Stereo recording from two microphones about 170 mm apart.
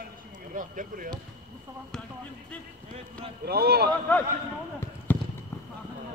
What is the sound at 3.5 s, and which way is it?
Speech, 65° right (ahead or behind).